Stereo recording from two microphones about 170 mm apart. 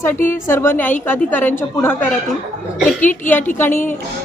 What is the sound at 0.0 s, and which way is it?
A woman's voice, 15° left (ahead or behind).